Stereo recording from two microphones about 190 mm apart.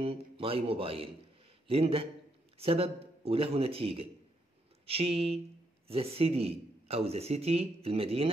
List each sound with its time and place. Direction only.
0.0 s a man's voice: 30° right (ahead or behind)